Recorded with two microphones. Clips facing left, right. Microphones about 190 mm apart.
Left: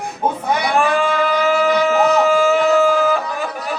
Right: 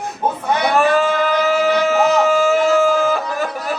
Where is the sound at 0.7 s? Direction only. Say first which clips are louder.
Right 2 dB; 40° right (ahead or behind).